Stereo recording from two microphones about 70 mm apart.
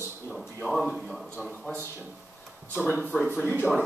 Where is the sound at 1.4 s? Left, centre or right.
Centre.